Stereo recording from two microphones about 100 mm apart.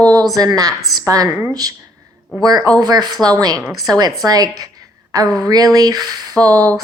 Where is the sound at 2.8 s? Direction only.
40° right (ahead or behind).